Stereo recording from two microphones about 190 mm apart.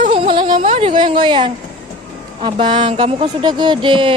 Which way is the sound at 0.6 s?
30° right (ahead or behind).